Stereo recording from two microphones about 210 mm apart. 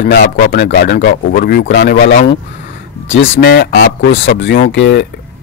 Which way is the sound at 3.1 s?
50° left (ahead or behind).